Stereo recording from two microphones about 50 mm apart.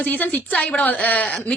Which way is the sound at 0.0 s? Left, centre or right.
Left.